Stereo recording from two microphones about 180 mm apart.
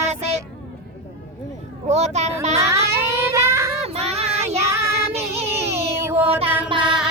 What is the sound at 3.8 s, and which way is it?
Child singing, 35° right (ahead or behind).